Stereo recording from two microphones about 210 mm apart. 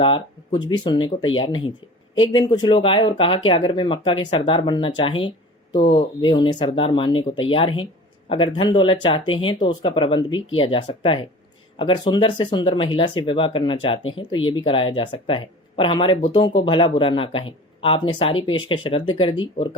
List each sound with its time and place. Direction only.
0.0 s speech: 25° left (ahead or behind)